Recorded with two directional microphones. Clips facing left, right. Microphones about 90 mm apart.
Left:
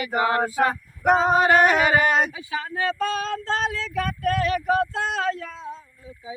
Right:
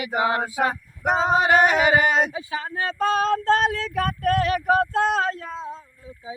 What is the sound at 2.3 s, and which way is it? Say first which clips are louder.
Speech: right 1 dB; 35° right (ahead or behind).